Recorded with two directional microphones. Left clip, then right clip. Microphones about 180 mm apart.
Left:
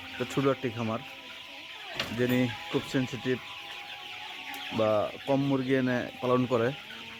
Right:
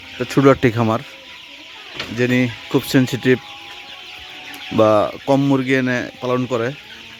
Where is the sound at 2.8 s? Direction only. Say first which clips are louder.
Right 14 dB; 50° right (ahead or behind).